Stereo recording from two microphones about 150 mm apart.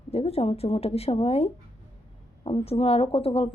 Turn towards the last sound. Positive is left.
turn(degrees=40)  # may be behind; listen again after turning